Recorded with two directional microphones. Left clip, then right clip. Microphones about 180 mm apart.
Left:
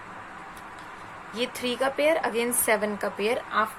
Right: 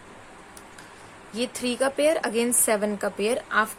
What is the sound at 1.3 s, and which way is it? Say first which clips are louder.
Speech: right 1 dB; 35° right (ahead or behind).